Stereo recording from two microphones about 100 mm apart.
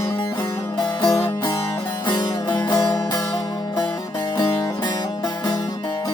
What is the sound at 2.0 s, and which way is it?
Music, 45° left (ahead or behind).